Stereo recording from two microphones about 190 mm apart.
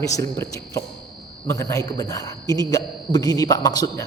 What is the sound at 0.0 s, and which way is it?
A man's voice, 15° left (ahead or behind).